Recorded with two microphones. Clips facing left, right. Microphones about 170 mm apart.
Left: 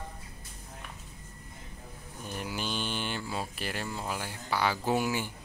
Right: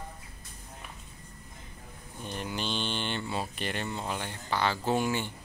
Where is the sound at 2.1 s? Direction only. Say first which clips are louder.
Right 1 dB; 10° left (ahead or behind).